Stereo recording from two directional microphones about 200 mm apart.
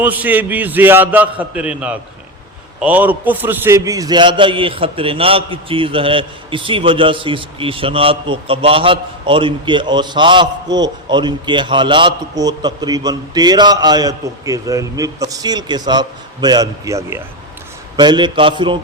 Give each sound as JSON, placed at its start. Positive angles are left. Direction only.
{"t": 0.0, "sound": "a man's voice", "side_deg": -10}